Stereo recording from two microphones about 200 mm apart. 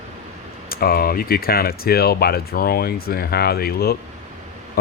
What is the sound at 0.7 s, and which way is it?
Speech, 50° left (ahead or behind).